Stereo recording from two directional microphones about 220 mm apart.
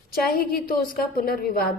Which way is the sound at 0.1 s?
45° left (ahead or behind).